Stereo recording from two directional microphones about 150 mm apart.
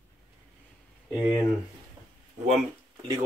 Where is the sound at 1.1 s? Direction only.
10° right (ahead or behind).